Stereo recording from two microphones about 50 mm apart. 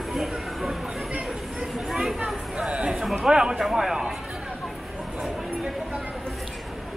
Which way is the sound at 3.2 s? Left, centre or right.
Centre.